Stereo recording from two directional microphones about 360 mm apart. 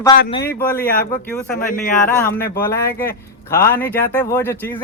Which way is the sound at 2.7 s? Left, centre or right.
Centre.